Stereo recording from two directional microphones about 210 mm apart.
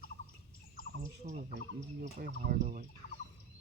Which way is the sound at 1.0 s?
40° right (ahead or behind).